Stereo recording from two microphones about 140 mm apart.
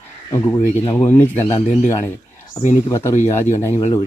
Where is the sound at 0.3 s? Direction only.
20° left (ahead or behind).